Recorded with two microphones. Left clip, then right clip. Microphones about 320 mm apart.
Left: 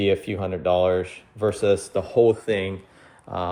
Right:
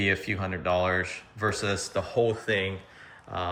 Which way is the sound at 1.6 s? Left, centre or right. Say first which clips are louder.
Left 8 dB; centre.